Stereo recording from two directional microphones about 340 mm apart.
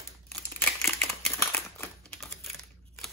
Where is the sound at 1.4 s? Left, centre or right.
Centre.